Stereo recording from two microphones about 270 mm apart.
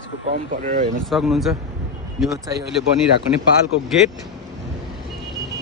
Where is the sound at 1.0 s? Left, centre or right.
Centre.